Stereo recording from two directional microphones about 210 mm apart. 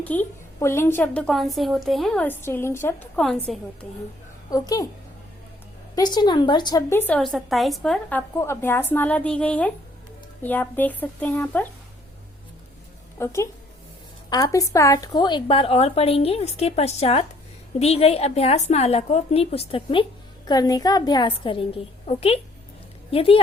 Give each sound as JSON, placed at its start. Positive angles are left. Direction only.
{"t": 0.0, "sound": "a woman's voice", "side_deg": 10}
{"t": 4.5, "sound": "a woman's voice", "side_deg": 15}
{"t": 5.9, "sound": "a woman's voice", "side_deg": 20}
{"t": 13.1, "sound": "a woman's voice", "side_deg": 15}